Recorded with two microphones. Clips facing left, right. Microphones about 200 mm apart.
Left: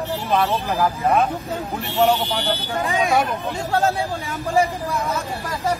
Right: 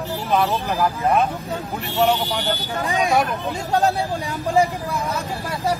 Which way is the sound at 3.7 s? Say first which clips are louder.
Right 1 dB; 15° right (ahead or behind).